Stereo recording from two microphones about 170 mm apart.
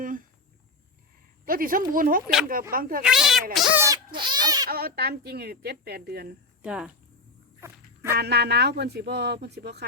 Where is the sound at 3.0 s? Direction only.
5° right (ahead or behind).